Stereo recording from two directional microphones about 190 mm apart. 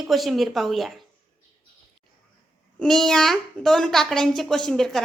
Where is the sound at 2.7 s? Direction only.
Centre (ahead or behind).